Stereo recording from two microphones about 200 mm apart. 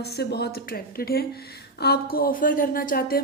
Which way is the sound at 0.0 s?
55° left (ahead or behind).